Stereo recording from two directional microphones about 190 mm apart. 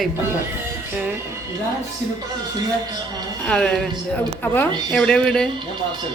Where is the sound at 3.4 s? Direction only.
5° left (ahead or behind).